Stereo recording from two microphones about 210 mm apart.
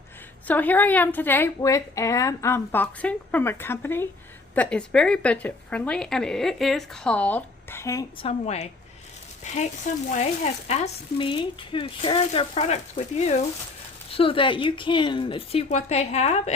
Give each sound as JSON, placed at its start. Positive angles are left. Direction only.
{"t": 0.4, "sound": "a woman's voice", "side_deg": 10}
{"t": 8.2, "sound": "speech", "side_deg": 30}